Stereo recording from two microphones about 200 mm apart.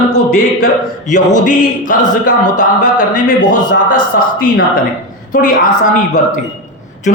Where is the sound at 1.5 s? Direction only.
40° left (ahead or behind).